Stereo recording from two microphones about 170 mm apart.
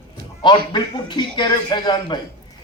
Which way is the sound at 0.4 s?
25° left (ahead or behind).